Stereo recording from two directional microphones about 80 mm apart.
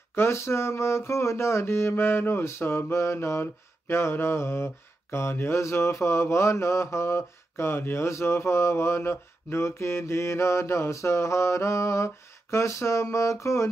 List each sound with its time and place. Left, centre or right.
0.1 s mantra: left